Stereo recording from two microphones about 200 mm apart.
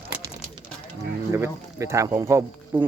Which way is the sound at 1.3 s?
15° right (ahead or behind).